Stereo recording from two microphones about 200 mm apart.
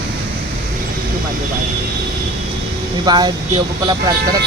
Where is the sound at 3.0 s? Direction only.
20° right (ahead or behind).